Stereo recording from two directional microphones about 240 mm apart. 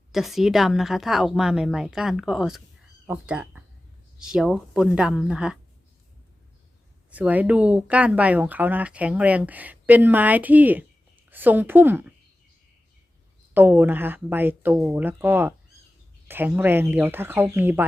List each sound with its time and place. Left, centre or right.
0.1 s a woman's voice: centre
7.1 s speech: centre
13.5 s speech: centre